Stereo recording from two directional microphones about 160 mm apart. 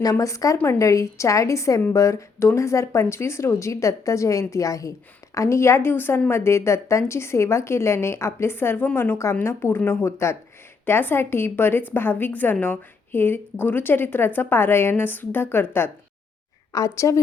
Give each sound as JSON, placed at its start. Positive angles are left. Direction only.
{"t": 0.0, "sound": "a woman's voice", "side_deg": 20}